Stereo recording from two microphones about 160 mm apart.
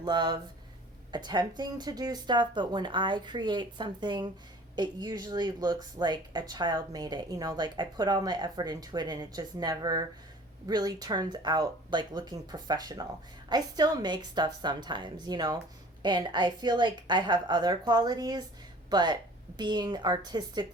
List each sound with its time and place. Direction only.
0.0 s speech: 25° right (ahead or behind)